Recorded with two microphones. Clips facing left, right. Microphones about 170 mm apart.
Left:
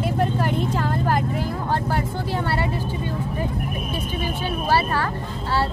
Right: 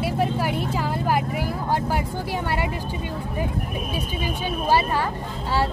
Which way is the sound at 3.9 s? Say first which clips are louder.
Even; 15° right (ahead or behind).